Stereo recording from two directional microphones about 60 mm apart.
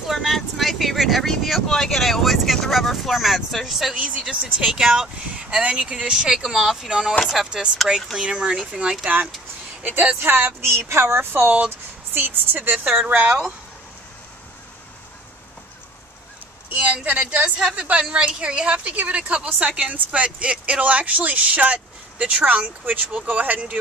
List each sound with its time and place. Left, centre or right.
0.0 s speech: centre
6.0 s speech: centre
8.2 s speech: centre
10.2 s a woman's voice: right
17.1 s speech: right
17.6 s speech: centre; by 23.8 s right